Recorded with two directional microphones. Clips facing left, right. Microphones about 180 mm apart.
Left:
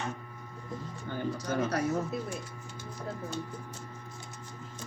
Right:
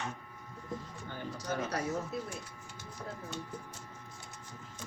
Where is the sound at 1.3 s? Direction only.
65° left (ahead or behind).